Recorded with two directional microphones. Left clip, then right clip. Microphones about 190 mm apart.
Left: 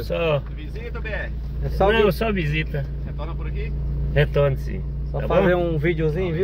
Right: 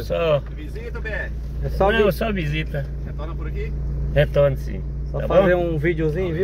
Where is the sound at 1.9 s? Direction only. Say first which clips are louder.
Even; 45° left (ahead or behind).